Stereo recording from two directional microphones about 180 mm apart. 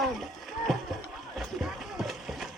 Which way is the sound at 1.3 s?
Centre (ahead or behind).